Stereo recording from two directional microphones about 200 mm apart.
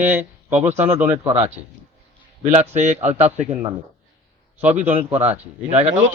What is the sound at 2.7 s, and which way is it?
Speech, 35° right (ahead or behind).